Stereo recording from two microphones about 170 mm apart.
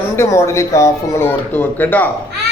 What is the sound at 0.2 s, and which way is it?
A man's voice, 15° left (ahead or behind).